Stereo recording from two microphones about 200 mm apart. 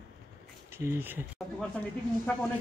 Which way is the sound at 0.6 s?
10° right (ahead or behind).